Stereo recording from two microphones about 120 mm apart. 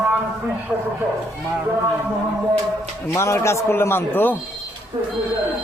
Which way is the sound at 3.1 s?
25° left (ahead or behind).